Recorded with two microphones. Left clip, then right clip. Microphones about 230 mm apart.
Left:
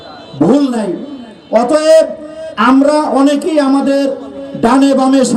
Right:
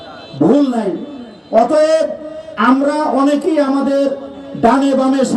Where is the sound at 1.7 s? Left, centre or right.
Left.